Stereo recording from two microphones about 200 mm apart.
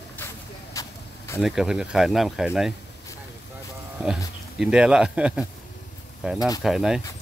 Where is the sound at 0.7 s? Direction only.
15° left (ahead or behind).